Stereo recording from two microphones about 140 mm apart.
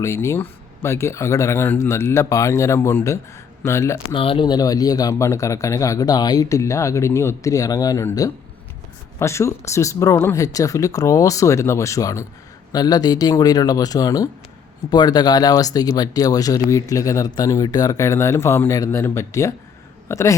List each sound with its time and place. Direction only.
0.0 s speech: 20° left (ahead or behind)
4.1 s speech: 40° left (ahead or behind); by 20.3 s 20° left (ahead or behind)